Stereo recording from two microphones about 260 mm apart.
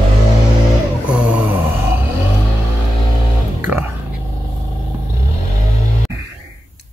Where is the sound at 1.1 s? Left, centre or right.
Centre.